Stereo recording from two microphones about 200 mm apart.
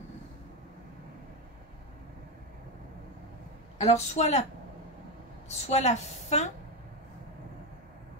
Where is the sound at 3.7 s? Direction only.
35° left (ahead or behind).